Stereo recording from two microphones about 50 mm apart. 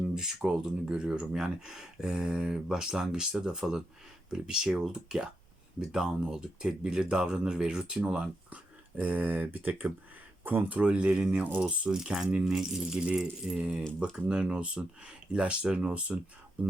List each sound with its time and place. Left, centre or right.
0.1 s speech: centre
9.0 s speech: right